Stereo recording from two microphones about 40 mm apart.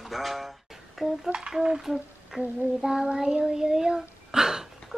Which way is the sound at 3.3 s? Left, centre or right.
Right.